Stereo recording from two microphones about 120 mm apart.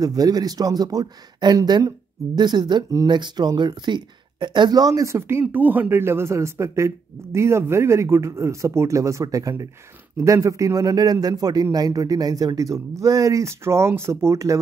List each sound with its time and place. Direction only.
0.0 s speech: 30° right (ahead or behind)
5.4 s a man's voice: 15° right (ahead or behind)